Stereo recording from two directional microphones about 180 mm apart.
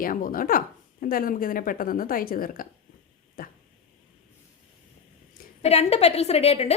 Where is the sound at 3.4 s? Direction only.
55° left (ahead or behind).